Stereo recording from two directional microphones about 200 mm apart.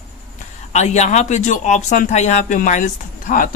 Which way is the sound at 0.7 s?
35° left (ahead or behind).